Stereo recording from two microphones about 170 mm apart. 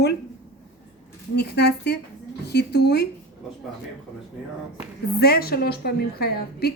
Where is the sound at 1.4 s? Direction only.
75° left (ahead or behind).